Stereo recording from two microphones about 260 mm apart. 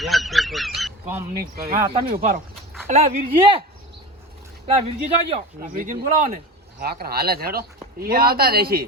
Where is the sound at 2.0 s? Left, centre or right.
Right.